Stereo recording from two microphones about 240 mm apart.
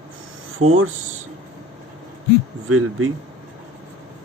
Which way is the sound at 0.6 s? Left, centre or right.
Right.